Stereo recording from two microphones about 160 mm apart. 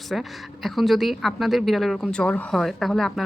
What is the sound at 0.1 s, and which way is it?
A woman's voice, centre (ahead or behind).